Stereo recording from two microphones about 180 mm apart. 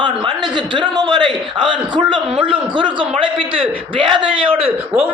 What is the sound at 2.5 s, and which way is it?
A man's voice, 25° right (ahead or behind).